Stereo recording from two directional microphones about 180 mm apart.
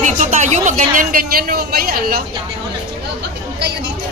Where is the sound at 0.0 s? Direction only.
45° right (ahead or behind).